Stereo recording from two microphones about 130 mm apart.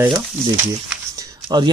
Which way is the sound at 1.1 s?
30° right (ahead or behind).